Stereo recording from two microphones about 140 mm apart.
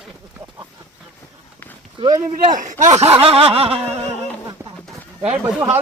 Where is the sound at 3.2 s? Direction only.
45° right (ahead or behind).